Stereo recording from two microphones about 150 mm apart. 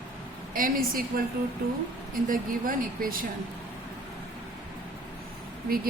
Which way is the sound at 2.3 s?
70° right (ahead or behind).